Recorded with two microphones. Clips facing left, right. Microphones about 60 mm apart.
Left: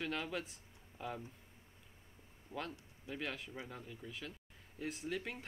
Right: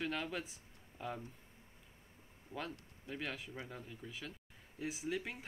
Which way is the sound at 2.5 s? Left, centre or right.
Right.